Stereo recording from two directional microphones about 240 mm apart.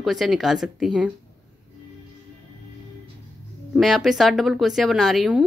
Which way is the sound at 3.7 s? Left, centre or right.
Centre.